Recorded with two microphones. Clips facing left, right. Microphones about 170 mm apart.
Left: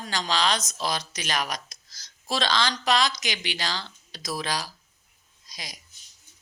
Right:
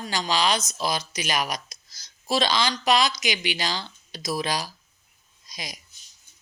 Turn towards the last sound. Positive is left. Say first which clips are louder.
# right 4 dB
turn(degrees=-15)  # may be behind; listen again after turning